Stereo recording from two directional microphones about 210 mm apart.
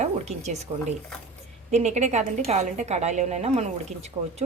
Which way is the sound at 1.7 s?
30° right (ahead or behind).